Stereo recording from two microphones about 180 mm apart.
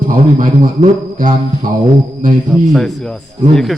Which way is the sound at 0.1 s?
50° right (ahead or behind).